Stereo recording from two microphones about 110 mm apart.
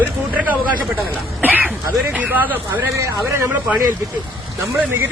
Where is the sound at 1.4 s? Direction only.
15° right (ahead or behind).